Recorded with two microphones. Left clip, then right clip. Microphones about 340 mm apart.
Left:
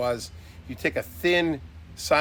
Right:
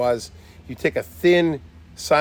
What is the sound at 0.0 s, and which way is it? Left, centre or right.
Speech, right.